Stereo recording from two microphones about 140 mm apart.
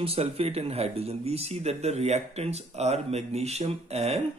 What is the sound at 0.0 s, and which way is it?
Speech, 45° right (ahead or behind).